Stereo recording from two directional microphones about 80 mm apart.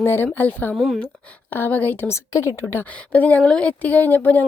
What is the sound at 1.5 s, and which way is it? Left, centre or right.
Speech, left.